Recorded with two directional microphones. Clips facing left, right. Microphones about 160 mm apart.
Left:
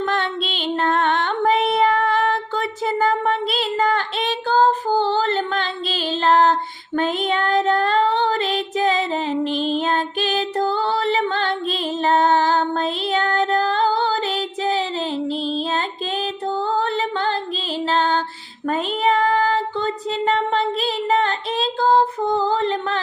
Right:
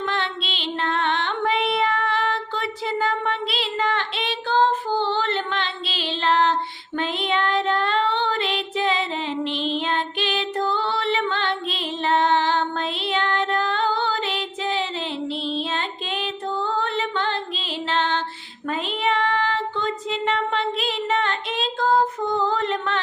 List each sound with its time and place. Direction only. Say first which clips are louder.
0.0 s music: left 4 dB; 45° left (ahead or behind)
18.7 s child singing: left 4 dB; 40° left (ahead or behind)